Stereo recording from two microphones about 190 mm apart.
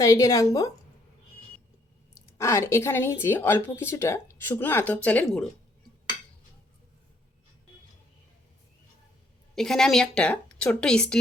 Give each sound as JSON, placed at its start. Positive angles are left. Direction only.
{"t": 0.0, "sound": "speech", "side_deg": 15}
{"t": 2.4, "sound": "speech", "side_deg": 15}
{"t": 9.6, "sound": "a woman's voice", "side_deg": 0}